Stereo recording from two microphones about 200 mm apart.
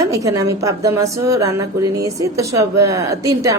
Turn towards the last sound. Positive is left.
turn(degrees=-15)  # may be behind; listen again after turning